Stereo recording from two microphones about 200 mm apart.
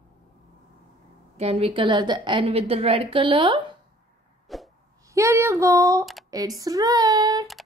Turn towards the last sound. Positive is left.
turn(degrees=-20)  # may be behind; listen again after turning